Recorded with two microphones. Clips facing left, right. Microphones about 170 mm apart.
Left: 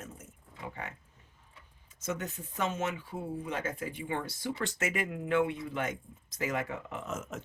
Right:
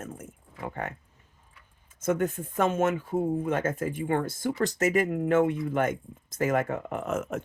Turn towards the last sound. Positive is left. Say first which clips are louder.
# right 8 dB
turn(degrees=-60)  # may be behind; listen again after turning